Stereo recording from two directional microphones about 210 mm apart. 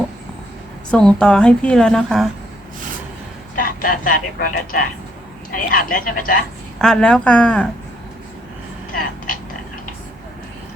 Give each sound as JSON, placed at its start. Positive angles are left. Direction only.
{"t": 0.9, "sound": "a woman's voice", "side_deg": 5}
{"t": 3.5, "sound": "a woman's voice", "side_deg": 40}
{"t": 6.7, "sound": "a woman's voice", "side_deg": 0}